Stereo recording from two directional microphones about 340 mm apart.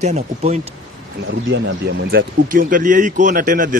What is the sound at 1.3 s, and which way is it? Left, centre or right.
Speech, right.